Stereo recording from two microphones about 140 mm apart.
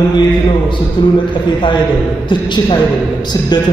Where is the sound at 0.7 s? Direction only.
35° left (ahead or behind).